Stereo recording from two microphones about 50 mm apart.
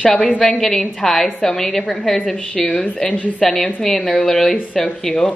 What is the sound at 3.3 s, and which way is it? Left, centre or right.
A woman's voice, centre.